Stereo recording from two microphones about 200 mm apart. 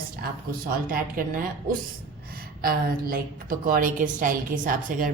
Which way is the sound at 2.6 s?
45° right (ahead or behind).